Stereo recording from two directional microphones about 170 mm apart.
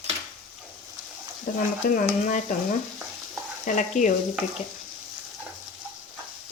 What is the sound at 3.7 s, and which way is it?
Stir, 45° left (ahead or behind).